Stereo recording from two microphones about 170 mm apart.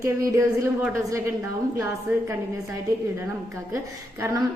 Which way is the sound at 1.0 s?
20° right (ahead or behind).